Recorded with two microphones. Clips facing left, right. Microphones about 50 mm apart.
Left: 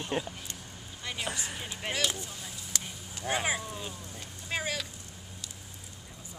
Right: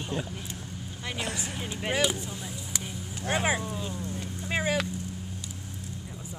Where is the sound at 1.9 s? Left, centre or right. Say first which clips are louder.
Right 5 dB; centre.